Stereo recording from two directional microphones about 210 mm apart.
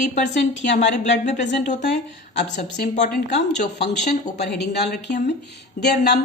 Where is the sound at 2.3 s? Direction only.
55° left (ahead or behind).